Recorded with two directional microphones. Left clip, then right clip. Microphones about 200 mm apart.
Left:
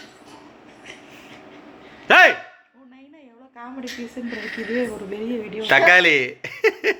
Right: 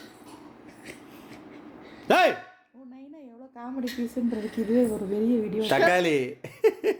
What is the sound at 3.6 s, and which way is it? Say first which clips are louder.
Speech: even; 40° right (ahead or behind).